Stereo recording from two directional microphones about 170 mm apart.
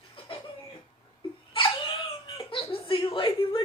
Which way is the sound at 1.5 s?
30° left (ahead or behind).